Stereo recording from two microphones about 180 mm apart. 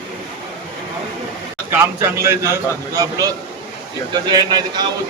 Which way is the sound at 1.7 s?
15° right (ahead or behind).